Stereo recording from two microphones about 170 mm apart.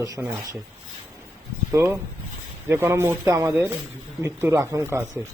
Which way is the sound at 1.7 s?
15° right (ahead or behind).